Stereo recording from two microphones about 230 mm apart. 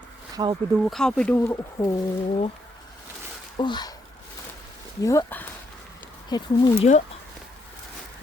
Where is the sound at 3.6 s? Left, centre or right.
Centre.